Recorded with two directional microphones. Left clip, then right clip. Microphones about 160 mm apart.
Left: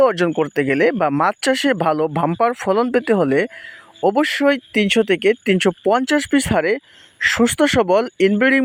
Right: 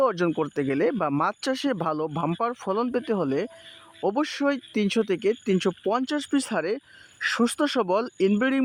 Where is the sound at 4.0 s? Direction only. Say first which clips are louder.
Left 9 dB; 15° left (ahead or behind).